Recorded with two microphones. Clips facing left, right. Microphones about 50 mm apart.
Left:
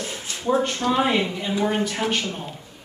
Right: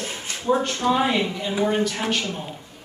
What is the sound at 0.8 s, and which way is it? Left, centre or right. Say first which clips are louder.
Speech: right 2 dB; centre.